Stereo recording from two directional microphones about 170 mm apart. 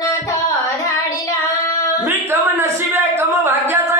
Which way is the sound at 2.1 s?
15° right (ahead or behind).